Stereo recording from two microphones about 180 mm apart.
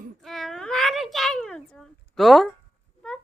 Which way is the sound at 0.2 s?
Centre (ahead or behind).